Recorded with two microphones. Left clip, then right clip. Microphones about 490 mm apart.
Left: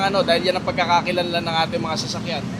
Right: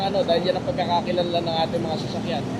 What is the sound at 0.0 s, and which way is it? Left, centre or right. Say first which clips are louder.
Speech: left 3 dB; left.